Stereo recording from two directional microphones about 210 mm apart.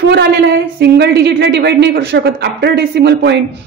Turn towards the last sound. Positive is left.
turn(degrees=-55)  # may be behind; listen again after turning